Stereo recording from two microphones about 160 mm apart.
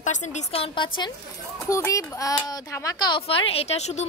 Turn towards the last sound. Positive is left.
turn(degrees=45)  # may be behind; listen again after turning